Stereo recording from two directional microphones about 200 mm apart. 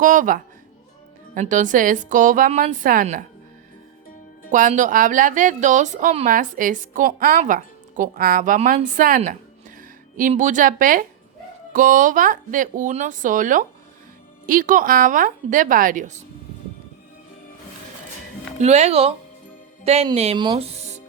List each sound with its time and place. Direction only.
0.0 s speech: 40° right (ahead or behind)
4.5 s a woman's voice: 40° right (ahead or behind)
18.6 s speech: 35° right (ahead or behind)